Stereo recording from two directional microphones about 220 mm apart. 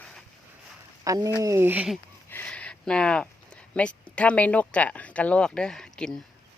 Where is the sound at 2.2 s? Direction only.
10° left (ahead or behind).